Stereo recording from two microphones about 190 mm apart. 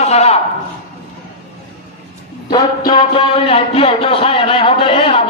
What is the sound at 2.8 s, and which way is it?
Speech, 30° left (ahead or behind).